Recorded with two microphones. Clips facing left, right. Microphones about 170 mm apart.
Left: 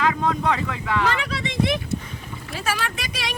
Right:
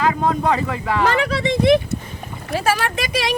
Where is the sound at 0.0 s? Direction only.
45° right (ahead or behind).